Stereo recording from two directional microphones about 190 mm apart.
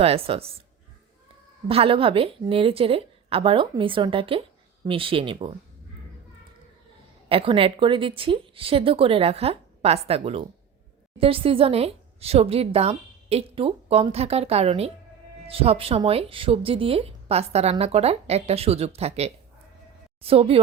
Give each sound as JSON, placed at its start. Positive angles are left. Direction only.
{"t": 0.0, "sound": "speech", "side_deg": -30}
{"t": 1.6, "sound": "a woman's voice", "side_deg": -30}
{"t": 7.3, "sound": "a woman's voice", "side_deg": -30}